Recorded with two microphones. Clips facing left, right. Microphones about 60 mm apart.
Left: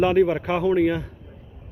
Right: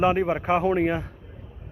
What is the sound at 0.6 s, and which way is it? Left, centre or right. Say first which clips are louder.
Speech: left 2 dB; right.